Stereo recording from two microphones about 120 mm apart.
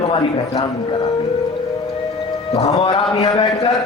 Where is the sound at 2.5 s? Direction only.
55° left (ahead or behind).